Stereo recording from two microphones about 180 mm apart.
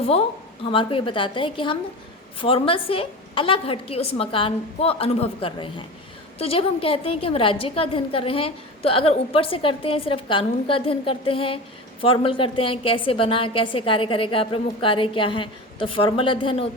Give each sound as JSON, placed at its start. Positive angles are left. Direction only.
{"t": 0.6, "sound": "a woman's voice", "side_deg": 30}